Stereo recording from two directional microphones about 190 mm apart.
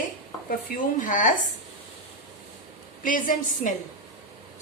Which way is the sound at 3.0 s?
45° left (ahead or behind).